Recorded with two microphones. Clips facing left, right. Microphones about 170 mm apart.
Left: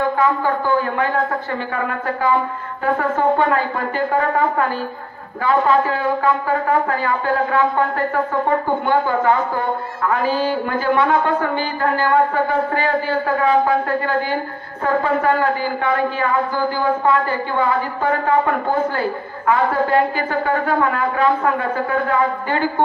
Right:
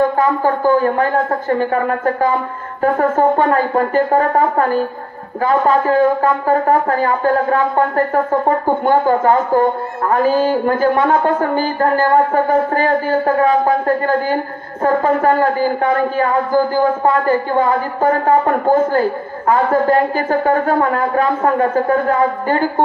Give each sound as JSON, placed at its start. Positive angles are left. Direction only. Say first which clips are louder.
{"t": 0.2, "sound": "a man's voice", "louder": "right 3 dB", "side_deg": -45}